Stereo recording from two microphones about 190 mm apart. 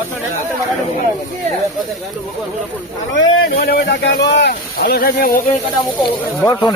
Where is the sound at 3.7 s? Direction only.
55° left (ahead or behind).